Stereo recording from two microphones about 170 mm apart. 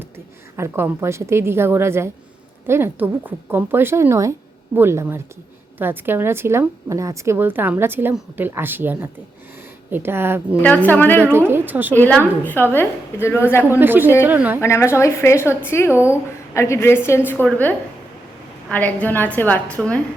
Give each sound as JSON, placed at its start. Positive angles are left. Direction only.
{"t": 0.5, "sound": "a woman's voice", "side_deg": -15}
{"t": 10.8, "sound": "a woman's voice", "side_deg": 10}
{"t": 11.2, "sound": "a woman's voice", "side_deg": -15}
{"t": 11.9, "sound": "a woman's voice", "side_deg": 10}
{"t": 13.7, "sound": "a woman's voice", "side_deg": -10}
{"t": 14.6, "sound": "a woman's voice", "side_deg": 15}